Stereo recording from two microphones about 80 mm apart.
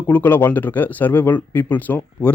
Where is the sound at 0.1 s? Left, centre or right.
Left.